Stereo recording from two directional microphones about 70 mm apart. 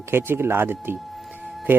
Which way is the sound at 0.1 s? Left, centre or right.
Right.